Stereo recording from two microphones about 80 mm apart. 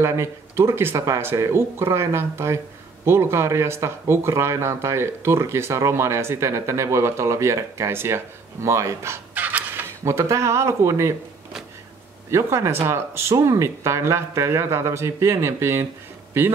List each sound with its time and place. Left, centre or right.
0.0 s speech: right
9.3 s fowl: right
9.6 s speech: right
12.3 s speech: right